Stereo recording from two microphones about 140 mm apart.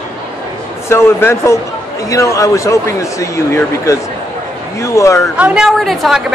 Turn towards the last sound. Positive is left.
turn(degrees=0)  # may be behind; listen again after turning